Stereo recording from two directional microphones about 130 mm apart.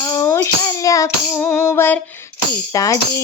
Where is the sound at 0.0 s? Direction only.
30° left (ahead or behind).